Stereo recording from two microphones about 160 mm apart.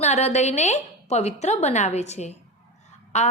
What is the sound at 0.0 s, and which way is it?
A woman's voice, 45° left (ahead or behind).